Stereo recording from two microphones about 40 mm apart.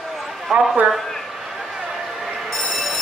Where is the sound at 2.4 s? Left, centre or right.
Centre.